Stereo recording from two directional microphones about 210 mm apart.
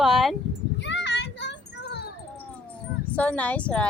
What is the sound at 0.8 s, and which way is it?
Child singing, 55° left (ahead or behind).